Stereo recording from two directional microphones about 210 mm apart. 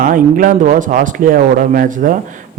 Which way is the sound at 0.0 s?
40° right (ahead or behind).